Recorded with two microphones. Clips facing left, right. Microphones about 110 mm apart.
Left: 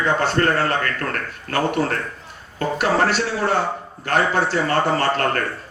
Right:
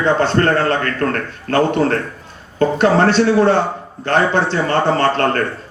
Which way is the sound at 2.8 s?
30° right (ahead or behind).